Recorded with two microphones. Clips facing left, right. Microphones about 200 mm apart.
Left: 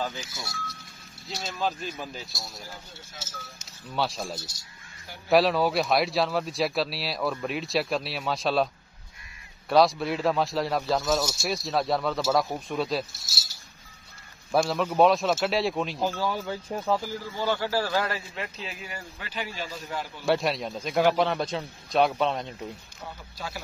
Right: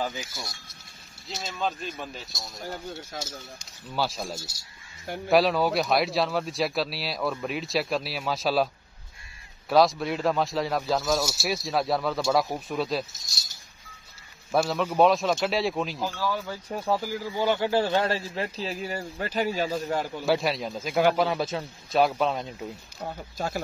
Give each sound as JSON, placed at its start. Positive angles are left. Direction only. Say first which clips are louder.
{"t": 0.0, "sound": "speech", "louder": "right 1 dB", "side_deg": -10}
{"t": 1.3, "sound": "a man's voice", "louder": "even", "side_deg": 0}
{"t": 3.9, "sound": "a man's voice", "louder": "even", "side_deg": 0}
{"t": 9.7, "sound": "a man's voice", "louder": "even", "side_deg": 0}
{"t": 14.5, "sound": "a man's voice", "louder": "even", "side_deg": 0}
{"t": 16.0, "sound": "speech", "louder": "left 1 dB", "side_deg": 20}
{"t": 16.8, "sound": "a man's voice", "louder": "right 2 dB", "side_deg": -15}
{"t": 20.2, "sound": "a man's voice", "louder": "left 1 dB", "side_deg": 0}
{"t": 22.9, "sound": "speech", "louder": "right 7 dB", "side_deg": -45}